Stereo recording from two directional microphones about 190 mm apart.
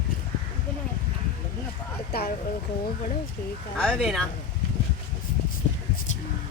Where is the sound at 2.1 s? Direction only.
55° left (ahead or behind).